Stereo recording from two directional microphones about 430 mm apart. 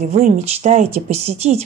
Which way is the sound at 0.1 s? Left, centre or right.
Centre.